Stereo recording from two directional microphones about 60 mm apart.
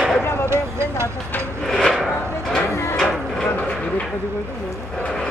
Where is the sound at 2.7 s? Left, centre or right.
Left.